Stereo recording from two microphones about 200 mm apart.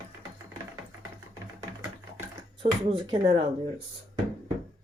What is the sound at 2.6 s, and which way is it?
Speech, 30° right (ahead or behind).